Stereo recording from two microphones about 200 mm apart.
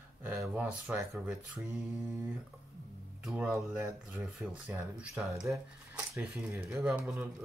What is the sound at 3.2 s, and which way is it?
Speech, 5° right (ahead or behind).